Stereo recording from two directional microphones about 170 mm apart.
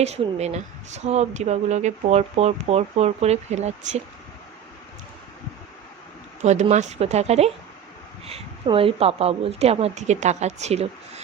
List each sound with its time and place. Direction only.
0.0 s speech: 40° right (ahead or behind)
6.4 s speech: 45° right (ahead or behind)